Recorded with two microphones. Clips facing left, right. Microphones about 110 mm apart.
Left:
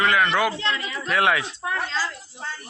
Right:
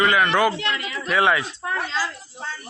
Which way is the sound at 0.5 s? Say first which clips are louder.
Even; 30° left (ahead or behind).